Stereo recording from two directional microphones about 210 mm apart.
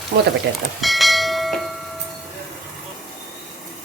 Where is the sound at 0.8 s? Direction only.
Centre (ahead or behind).